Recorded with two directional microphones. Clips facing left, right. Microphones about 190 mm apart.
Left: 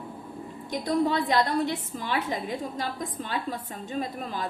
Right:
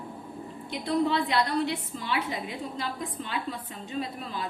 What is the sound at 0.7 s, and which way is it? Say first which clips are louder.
A woman's voice: left 1 dB; 45° left (ahead or behind).